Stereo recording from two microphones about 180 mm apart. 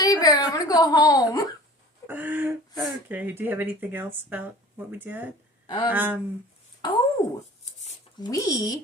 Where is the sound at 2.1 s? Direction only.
10° right (ahead or behind).